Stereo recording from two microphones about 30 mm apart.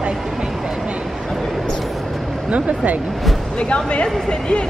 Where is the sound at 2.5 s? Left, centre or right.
Right.